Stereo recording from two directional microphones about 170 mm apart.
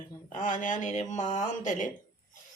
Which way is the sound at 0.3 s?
50° left (ahead or behind).